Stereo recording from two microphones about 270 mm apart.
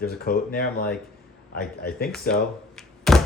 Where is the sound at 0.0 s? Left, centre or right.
Left.